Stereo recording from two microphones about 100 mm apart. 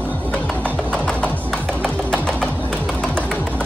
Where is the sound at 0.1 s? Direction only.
15° left (ahead or behind).